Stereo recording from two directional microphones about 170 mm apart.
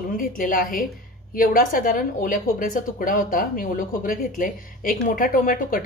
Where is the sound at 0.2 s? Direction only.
55° left (ahead or behind).